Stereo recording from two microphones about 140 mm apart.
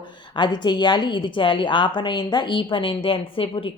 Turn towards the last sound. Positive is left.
turn(degrees=40)  # may be behind; listen again after turning